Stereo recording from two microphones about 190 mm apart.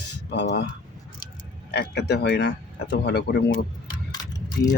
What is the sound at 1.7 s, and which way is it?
Speech, 60° left (ahead or behind).